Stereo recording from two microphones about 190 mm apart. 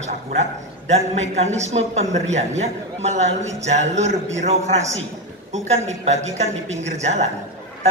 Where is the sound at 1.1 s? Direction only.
35° right (ahead or behind).